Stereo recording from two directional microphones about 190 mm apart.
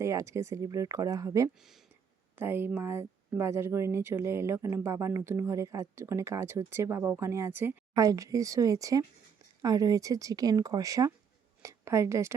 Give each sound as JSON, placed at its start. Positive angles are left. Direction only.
{"t": 0.0, "sound": "a woman's voice", "side_deg": -15}